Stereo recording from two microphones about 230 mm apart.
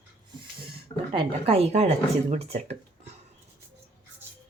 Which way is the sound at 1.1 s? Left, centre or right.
Right.